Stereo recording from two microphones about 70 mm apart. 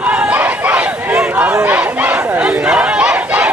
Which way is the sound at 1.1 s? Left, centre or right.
Centre.